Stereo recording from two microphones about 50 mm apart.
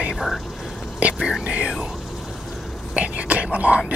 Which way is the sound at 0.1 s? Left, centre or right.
Centre.